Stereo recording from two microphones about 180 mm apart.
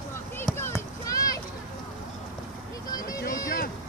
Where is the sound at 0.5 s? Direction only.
15° left (ahead or behind).